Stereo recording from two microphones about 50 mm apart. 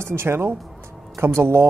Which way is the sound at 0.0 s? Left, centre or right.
Right.